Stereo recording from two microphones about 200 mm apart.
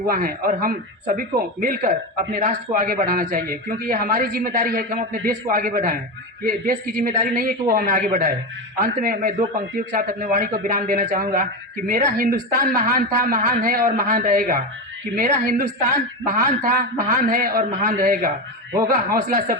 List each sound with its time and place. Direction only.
0.1 s a man's voice: 45° right (ahead or behind)